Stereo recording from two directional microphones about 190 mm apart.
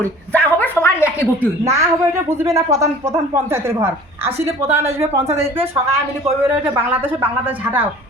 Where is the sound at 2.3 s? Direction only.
15° right (ahead or behind).